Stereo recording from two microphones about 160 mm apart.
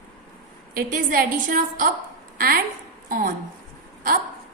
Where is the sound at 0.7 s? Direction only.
65° right (ahead or behind).